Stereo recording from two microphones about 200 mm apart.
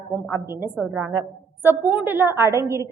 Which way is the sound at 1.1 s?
15° right (ahead or behind).